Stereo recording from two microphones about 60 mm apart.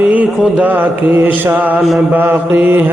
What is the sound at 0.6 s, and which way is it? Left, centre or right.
Mantra, right.